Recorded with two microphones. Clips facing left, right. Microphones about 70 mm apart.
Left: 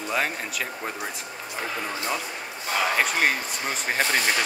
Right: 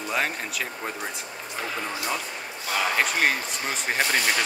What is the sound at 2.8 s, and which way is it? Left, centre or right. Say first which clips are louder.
Speech: left 1 dB; centre.